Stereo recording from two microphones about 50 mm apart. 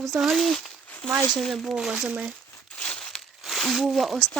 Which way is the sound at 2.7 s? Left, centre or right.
Left.